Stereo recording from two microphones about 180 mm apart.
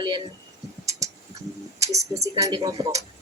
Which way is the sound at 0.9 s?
15° right (ahead or behind).